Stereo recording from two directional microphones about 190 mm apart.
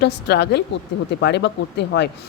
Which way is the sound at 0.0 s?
60° left (ahead or behind).